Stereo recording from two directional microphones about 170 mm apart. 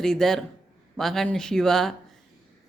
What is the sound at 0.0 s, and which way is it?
A woman's voice, 5° left (ahead or behind).